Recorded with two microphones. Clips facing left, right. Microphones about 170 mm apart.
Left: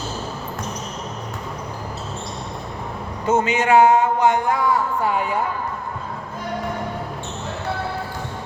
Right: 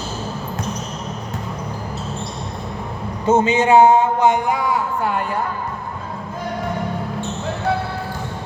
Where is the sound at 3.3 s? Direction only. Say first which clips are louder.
Right 3 dB; 25° right (ahead or behind).